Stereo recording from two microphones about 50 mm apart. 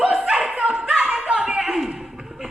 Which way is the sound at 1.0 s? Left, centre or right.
Centre.